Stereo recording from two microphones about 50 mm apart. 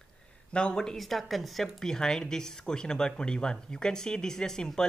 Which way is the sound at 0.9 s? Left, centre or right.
Centre.